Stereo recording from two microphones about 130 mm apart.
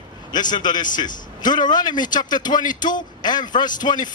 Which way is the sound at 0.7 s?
80° left.